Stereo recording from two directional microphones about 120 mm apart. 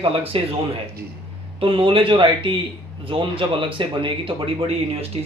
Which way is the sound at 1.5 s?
45° right (ahead or behind).